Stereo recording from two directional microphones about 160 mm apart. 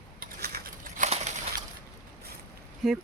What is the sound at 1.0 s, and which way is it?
Crushing, 45° right (ahead or behind).